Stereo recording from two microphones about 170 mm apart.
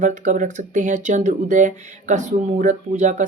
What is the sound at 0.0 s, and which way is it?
Speech, 50° right (ahead or behind).